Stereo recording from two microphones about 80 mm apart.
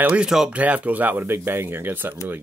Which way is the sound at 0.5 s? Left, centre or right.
Centre.